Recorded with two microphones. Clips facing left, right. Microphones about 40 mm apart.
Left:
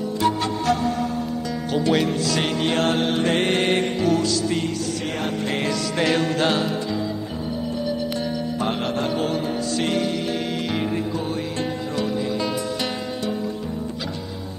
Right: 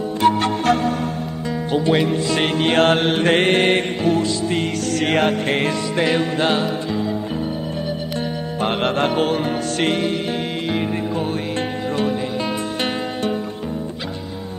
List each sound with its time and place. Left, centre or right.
0.2 s music: right
1.7 s speech: right
2.3 s music: right
5.0 s music: right
5.9 s music: centre
8.5 s music: right
10.7 s music: centre
12.0 s music: right